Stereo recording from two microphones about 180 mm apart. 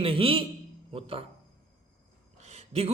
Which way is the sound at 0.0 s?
30° right (ahead or behind).